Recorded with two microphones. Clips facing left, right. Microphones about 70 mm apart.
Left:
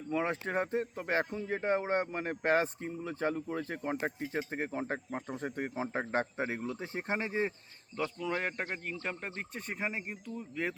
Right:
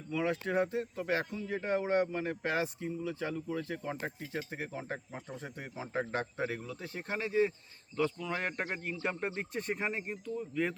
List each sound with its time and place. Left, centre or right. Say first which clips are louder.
0.1 s speech: even; left
7.9 s speech: right 1 dB; centre